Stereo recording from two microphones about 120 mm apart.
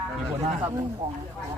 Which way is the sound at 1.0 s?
55° right (ahead or behind).